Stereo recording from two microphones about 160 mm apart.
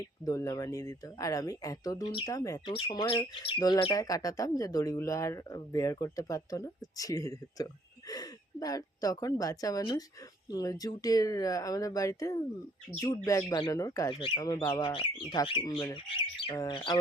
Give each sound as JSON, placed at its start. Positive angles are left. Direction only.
{"t": 0.3, "sound": "speech", "side_deg": 20}